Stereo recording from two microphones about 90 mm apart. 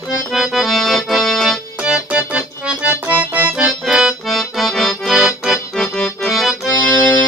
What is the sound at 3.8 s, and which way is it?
Accordion, 5° right (ahead or behind).